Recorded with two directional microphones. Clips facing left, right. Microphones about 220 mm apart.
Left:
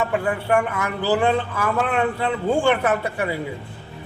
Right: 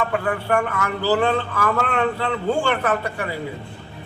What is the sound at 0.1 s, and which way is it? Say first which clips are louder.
Speech: left 1 dB; 20° left (ahead or behind).